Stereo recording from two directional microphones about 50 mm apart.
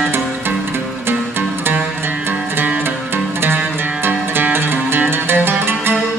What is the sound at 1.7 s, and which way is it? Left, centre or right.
Music, right.